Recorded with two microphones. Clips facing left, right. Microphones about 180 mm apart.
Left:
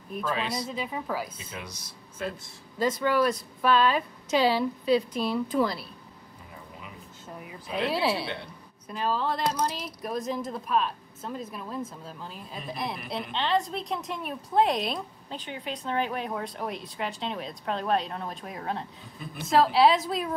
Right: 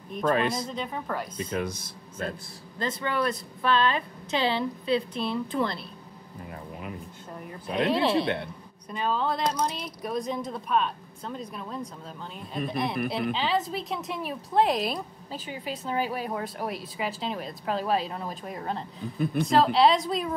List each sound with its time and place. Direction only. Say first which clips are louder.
0.3 s speech: right 6 dB; 50° right (ahead or behind)
0.7 s a woman's voice: even; 5° left (ahead or behind)
1.4 s speech: right 11 dB; 50° right (ahead or behind)
2.8 s speech: left 4 dB; 5° left (ahead or behind)
7.9 s a woman's voice: right 5 dB; 5° left (ahead or behind)